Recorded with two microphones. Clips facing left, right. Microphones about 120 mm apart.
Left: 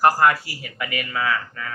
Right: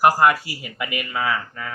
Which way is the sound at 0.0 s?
15° right (ahead or behind).